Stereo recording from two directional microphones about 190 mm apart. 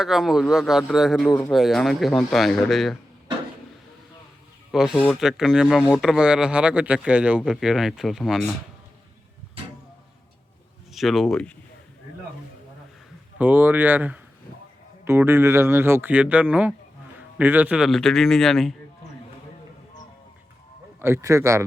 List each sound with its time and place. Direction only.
0.0 s speech: centre (ahead or behind)
4.9 s speech: centre (ahead or behind)
10.9 s speech: centre (ahead or behind)
13.4 s speech: 10° right (ahead or behind)
21.0 s speech: 15° right (ahead or behind)